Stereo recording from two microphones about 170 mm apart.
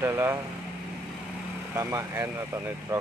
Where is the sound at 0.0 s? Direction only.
15° right (ahead or behind).